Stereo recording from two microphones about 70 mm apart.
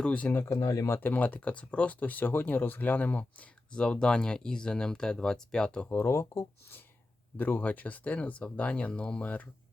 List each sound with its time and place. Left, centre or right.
0.0 s speech: centre
0.3 s speech: left
0.9 s speech: left
5.9 s speech: left
7.3 s speech: left